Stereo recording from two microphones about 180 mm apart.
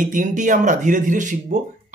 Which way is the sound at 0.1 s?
45° right (ahead or behind).